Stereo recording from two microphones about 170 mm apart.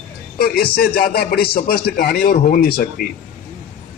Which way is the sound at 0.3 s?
65° left (ahead or behind).